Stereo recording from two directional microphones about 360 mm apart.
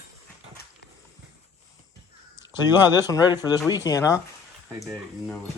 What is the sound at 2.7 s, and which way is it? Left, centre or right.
Speech, centre.